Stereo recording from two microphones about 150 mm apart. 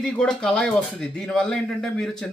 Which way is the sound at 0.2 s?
5° left (ahead or behind).